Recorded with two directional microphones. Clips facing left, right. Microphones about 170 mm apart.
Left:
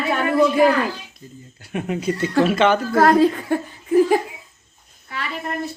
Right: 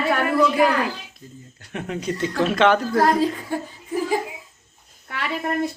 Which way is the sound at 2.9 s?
65° left (ahead or behind).